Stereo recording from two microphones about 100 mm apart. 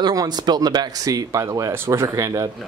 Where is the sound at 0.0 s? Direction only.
40° right (ahead or behind).